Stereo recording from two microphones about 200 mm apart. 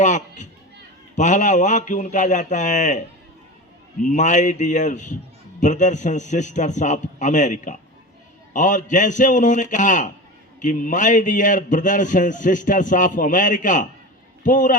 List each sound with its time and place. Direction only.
0.0 s a man's voice: 40° left (ahead or behind)
4.0 s a man's voice: 35° left (ahead or behind)